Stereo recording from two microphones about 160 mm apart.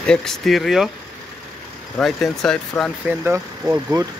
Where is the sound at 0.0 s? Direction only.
5° left (ahead or behind).